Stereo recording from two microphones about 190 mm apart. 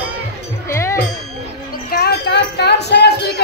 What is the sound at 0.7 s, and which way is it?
Music, 15° left (ahead or behind).